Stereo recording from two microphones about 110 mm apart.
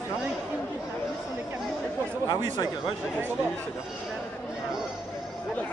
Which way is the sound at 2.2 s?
45° left (ahead or behind).